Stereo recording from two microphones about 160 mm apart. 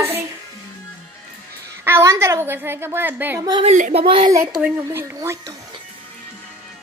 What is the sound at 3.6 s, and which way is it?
Speech, 40° right (ahead or behind).